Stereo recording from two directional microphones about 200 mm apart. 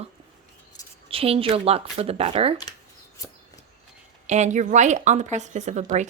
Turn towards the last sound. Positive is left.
turn(degrees=-35)  # may be behind; listen again after turning